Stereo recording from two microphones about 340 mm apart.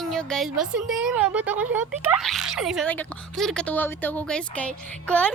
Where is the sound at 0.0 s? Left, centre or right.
Centre.